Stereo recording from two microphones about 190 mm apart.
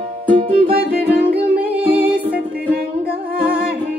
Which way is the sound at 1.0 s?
10° right (ahead or behind).